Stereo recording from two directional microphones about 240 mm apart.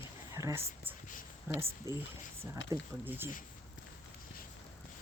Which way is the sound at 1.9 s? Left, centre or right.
Centre.